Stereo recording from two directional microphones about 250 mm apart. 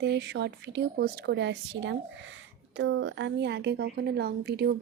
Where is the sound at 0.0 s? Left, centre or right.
Right.